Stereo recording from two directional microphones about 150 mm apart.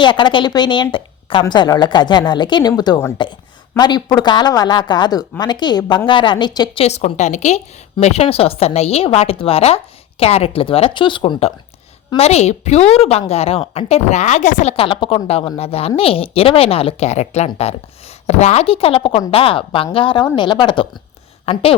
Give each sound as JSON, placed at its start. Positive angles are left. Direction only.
{"t": 0.0, "sound": "speech", "side_deg": 30}
{"t": 6.8, "sound": "a woman's voice", "side_deg": 50}